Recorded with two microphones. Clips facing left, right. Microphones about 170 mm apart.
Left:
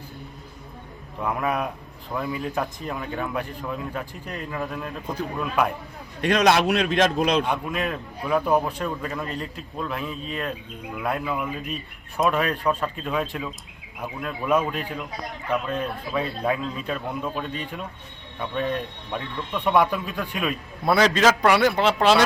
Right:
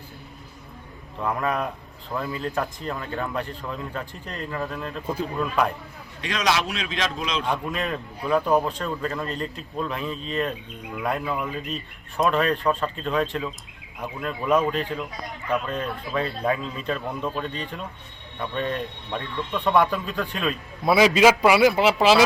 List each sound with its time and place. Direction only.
1.2 s speech: 5° left (ahead or behind)
6.2 s a man's voice: 55° left (ahead or behind)
7.7 s a man's voice: 5° left (ahead or behind)
20.8 s a man's voice: 5° right (ahead or behind)